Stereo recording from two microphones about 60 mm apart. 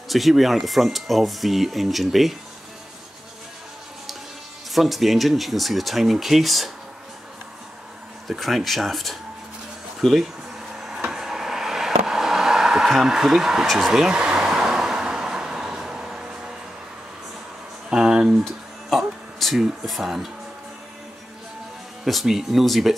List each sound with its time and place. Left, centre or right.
0.1 s speech: centre
4.7 s speech: centre
8.3 s speech: centre
10.7 s a sound: centre
13.7 s speech: centre
14.1 s vehicle: centre
17.8 s a sound: centre
18.3 s a sound: centre
19.6 s speech: centre
22.0 s speech: centre